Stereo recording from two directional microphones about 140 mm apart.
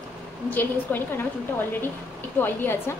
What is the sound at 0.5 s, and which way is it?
Speech, 15° left (ahead or behind).